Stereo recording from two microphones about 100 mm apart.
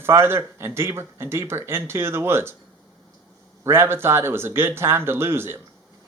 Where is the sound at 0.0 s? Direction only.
25° right (ahead or behind).